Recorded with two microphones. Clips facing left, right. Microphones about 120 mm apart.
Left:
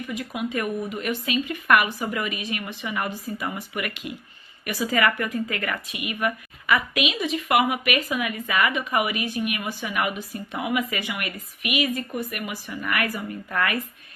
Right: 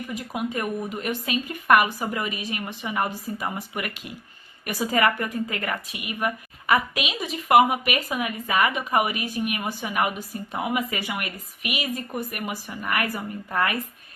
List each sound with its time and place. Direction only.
0.1 s a woman's voice: 35° right (ahead or behind)